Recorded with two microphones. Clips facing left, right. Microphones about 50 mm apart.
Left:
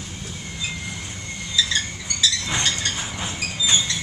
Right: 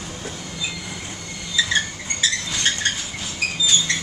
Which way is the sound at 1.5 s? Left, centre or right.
Right.